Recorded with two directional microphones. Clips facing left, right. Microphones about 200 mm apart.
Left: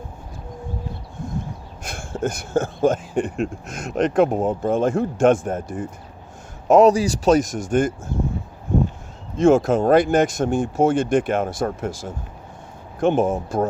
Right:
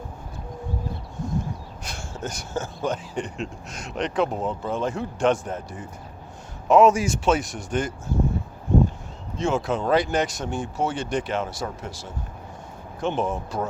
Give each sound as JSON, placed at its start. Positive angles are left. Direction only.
{"t": 1.2, "sound": "a sound", "side_deg": 55}
{"t": 1.8, "sound": "speech", "side_deg": 55}
{"t": 6.7, "sound": "speech", "side_deg": 40}
{"t": 9.4, "sound": "speech", "side_deg": 50}